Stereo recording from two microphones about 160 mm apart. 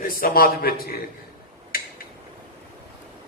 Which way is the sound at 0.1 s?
65° left (ahead or behind).